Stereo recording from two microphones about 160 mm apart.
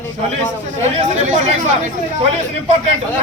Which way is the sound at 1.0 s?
45° right (ahead or behind).